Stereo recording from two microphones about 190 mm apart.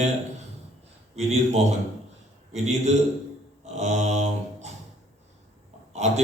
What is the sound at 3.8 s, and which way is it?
Mantra, 35° right (ahead or behind).